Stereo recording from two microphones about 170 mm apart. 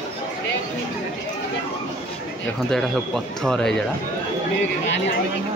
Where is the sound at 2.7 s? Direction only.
5° left (ahead or behind).